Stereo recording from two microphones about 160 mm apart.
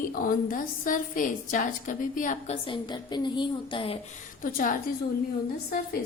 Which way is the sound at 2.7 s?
25° left (ahead or behind).